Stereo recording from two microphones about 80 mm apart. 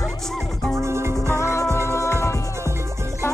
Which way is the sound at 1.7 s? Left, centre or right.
Right.